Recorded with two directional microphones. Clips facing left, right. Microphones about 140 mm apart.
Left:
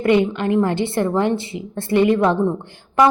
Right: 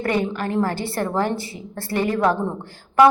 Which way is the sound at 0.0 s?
20° left (ahead or behind).